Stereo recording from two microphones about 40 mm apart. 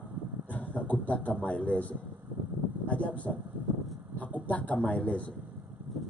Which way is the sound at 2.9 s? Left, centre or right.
Left.